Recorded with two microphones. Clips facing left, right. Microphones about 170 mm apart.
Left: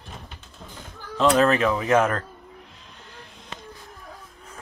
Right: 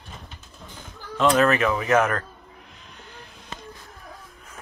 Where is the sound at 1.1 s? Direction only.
5° left (ahead or behind).